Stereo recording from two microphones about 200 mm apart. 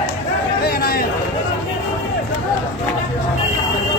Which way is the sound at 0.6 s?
50° left (ahead or behind).